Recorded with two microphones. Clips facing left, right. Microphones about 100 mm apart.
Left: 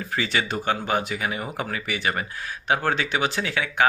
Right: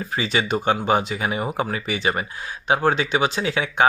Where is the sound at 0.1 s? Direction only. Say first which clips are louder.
Right 3 dB; 20° right (ahead or behind).